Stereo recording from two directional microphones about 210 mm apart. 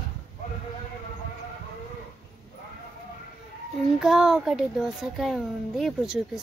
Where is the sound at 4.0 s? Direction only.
Centre (ahead or behind).